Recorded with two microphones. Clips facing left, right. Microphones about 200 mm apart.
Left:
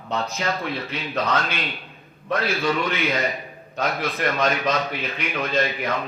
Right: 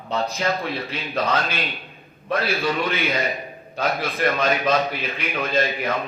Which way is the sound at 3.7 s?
30° right (ahead or behind).